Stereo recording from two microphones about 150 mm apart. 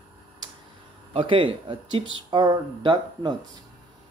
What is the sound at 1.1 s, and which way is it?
Speech, 35° right (ahead or behind).